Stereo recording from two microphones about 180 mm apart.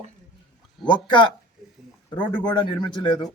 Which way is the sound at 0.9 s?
25° left (ahead or behind).